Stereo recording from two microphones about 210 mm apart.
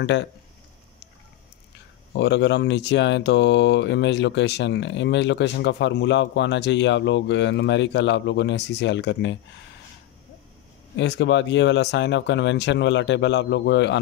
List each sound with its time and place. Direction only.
0.0 s speech: 60° left (ahead or behind)
2.1 s speech: 55° left (ahead or behind)
11.0 s speech: 55° left (ahead or behind)